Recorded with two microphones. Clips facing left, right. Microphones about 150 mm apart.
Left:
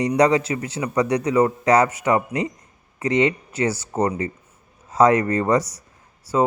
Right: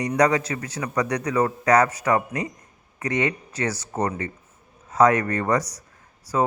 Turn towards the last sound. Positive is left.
turn(degrees=20)  # may be behind; listen again after turning